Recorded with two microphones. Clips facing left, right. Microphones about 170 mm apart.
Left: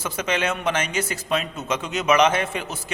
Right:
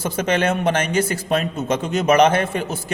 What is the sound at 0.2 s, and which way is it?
A man's voice, 50° right (ahead or behind).